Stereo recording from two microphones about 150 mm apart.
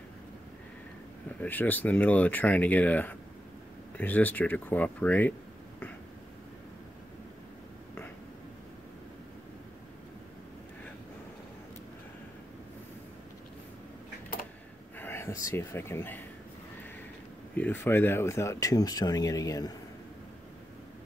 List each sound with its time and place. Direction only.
1.4 s speech: 10° left (ahead or behind)
15.0 s speech: 15° left (ahead or behind)
17.6 s speech: 15° left (ahead or behind)